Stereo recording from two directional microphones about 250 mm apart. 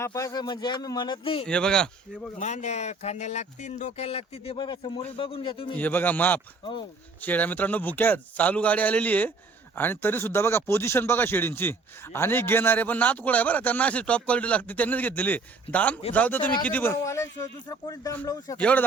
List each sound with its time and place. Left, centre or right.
0.0 s speech: centre
1.5 s speech: centre
2.4 s speech: left
5.7 s speech: centre